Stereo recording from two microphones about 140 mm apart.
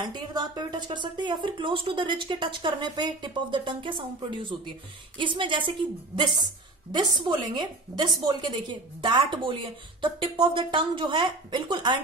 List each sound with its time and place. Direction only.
0.1 s speech: 30° right (ahead or behind)